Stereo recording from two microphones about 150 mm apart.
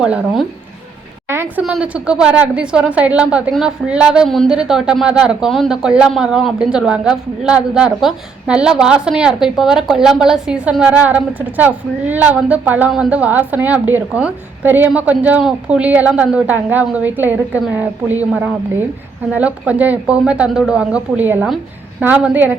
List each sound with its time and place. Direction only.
0.0 s speech: 5° right (ahead or behind)
1.3 s a sound: 15° right (ahead or behind)
1.6 s speech: 5° right (ahead or behind)